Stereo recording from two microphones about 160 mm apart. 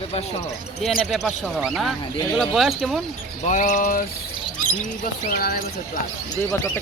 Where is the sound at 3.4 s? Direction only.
50° left (ahead or behind).